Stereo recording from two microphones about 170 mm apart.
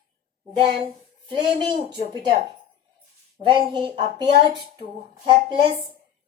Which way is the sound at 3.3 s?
30° right (ahead or behind).